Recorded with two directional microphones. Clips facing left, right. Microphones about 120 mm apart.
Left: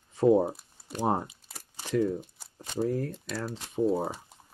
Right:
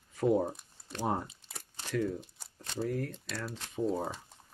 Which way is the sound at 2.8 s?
30° left (ahead or behind).